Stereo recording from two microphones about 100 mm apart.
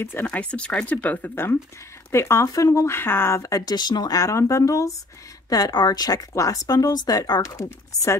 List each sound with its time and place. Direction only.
0.0 s speech: 20° left (ahead or behind)